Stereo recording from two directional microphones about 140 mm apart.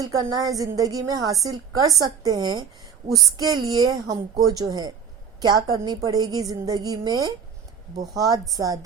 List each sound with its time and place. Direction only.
0.0 s a woman's voice: 25° right (ahead or behind)